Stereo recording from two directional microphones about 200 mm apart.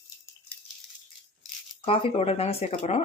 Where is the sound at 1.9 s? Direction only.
30° left (ahead or behind).